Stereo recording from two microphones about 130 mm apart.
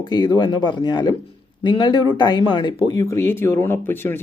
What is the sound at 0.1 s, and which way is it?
Speech, 35° left (ahead or behind).